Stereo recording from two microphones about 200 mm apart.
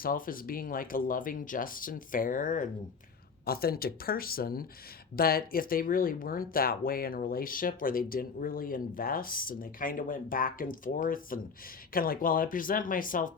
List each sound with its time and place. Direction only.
0.0 s speech: 45° left (ahead or behind)